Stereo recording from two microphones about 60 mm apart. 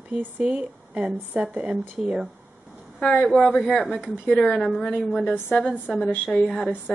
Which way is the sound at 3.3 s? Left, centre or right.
Centre.